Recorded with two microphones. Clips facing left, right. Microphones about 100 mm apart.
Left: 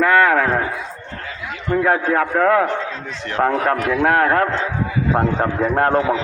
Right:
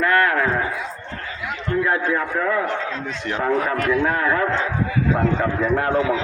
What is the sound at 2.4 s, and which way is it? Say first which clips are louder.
Speech: left 9 dB; 80° left.